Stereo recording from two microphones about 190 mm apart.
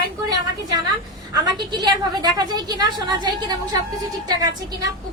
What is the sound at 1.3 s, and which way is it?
A woman's voice, 25° right (ahead or behind).